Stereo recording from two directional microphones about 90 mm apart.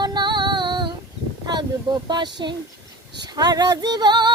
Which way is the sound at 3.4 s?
50° right (ahead or behind).